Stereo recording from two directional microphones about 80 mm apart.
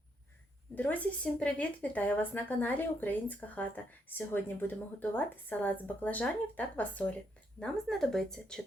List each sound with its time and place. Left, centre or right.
0.8 s speech: centre
7.6 s speech: centre